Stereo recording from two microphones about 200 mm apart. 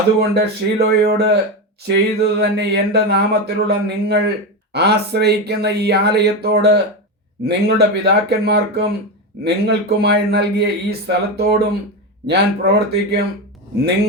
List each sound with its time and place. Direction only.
0.2 s speech: 50° right (ahead or behind)